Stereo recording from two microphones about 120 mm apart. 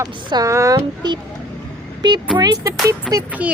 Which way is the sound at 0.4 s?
25° right (ahead or behind).